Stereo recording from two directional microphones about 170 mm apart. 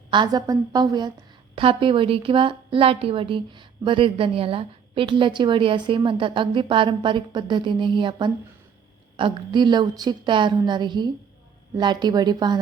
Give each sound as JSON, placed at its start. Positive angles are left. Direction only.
{"t": 0.1, "sound": "a woman's voice", "side_deg": -25}